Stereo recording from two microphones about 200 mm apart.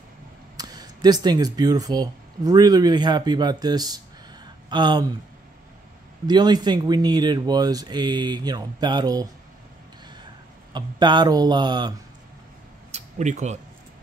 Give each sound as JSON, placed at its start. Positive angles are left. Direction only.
{"t": 0.6, "sound": "speech", "side_deg": -20}
{"t": 6.2, "sound": "speech", "side_deg": -20}
{"t": 10.7, "sound": "speech", "side_deg": -20}
{"t": 12.9, "sound": "a sound", "side_deg": -35}